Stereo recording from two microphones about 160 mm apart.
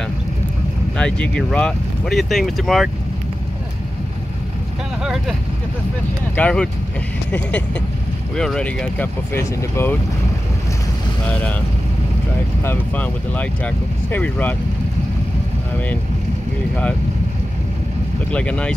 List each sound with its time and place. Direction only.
0.9 s speech: 5° left (ahead or behind)
5.0 s speech: centre (ahead or behind)
6.3 s speech: 5° left (ahead or behind)
12.6 s speech: 10° left (ahead or behind)
18.3 s speech: 5° left (ahead or behind)